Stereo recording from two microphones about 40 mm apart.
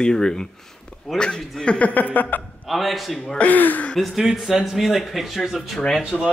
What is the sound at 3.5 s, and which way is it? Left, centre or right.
Speech, left.